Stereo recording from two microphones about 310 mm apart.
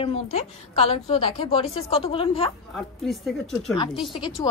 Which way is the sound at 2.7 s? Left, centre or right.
Centre.